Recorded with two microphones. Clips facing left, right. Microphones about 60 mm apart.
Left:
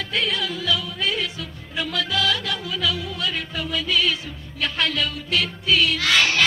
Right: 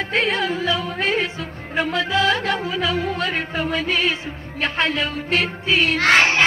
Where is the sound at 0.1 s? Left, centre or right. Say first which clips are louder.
Right 5 dB; right.